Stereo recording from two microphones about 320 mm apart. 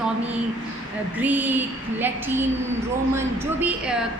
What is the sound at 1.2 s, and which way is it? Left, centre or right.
A woman's voice, centre.